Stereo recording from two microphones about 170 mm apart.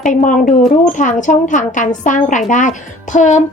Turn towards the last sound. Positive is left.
turn(degrees=45)  # may be behind; listen again after turning